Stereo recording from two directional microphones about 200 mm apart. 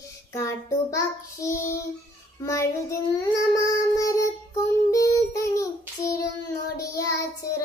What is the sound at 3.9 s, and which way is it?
Child singing, 15° left (ahead or behind).